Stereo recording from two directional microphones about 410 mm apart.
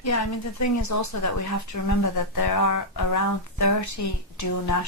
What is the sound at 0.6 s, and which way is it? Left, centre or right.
Speech, left.